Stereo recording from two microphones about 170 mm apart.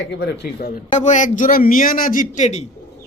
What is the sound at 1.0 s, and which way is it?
Speech, 45° left (ahead or behind).